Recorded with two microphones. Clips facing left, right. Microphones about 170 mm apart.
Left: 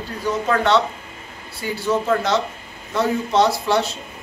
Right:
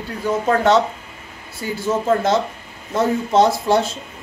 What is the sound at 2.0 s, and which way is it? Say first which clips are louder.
Speech: right 2 dB; 50° right (ahead or behind).